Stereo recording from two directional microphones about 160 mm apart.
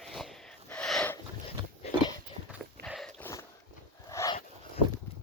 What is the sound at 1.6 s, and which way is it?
Dog, 30° right (ahead or behind).